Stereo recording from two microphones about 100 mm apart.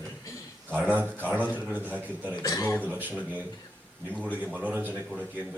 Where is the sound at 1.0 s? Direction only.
20° right (ahead or behind).